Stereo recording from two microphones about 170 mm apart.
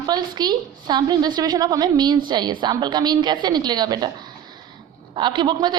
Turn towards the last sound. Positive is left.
turn(degrees=-25)  # may be behind; listen again after turning